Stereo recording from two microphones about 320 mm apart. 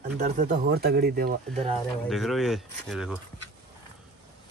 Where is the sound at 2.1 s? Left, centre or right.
Centre.